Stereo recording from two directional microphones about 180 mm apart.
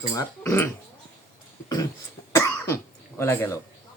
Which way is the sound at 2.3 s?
15° left (ahead or behind).